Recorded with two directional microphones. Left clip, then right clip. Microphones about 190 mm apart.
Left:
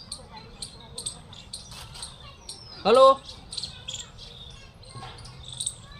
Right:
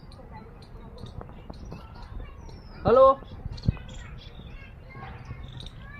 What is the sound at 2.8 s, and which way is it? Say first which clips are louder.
Speech: left 1 dB; 10° left (ahead or behind).